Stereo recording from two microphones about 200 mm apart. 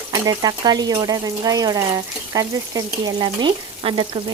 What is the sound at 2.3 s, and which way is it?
Frying, 15° right (ahead or behind).